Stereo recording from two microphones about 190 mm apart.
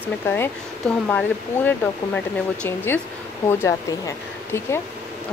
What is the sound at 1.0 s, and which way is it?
Speech, 5° left (ahead or behind).